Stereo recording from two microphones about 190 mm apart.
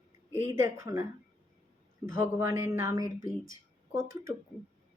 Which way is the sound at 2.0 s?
15° right (ahead or behind).